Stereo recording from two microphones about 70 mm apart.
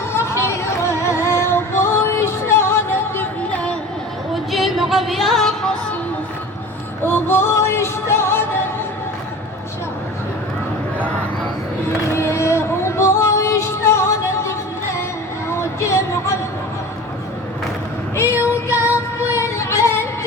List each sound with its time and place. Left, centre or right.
0.1 s music: left
3.5 s a sound: centre
4.5 s music: centre
7.0 s music: left
12.1 s music: left
15.4 s a sound: left
18.2 s female singing: left
19.3 s music: left